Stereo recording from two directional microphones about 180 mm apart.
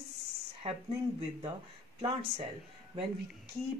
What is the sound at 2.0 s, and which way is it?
Speech, 30° right (ahead or behind).